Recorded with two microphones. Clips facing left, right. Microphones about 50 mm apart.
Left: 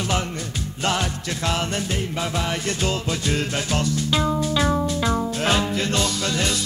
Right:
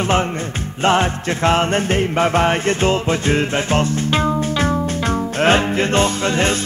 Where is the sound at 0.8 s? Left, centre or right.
Right.